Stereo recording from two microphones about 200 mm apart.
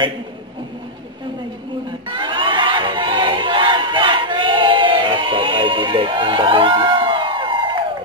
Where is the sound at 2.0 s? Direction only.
25° right (ahead or behind).